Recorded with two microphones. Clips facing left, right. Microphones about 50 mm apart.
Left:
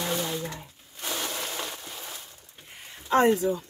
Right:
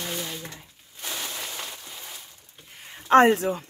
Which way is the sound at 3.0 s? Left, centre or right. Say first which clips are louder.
Right 4 dB; right.